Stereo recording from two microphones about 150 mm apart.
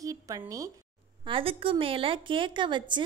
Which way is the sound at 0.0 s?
25° right (ahead or behind).